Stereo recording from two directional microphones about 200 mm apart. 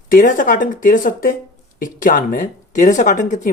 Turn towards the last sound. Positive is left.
turn(degrees=40)  # may be behind; listen again after turning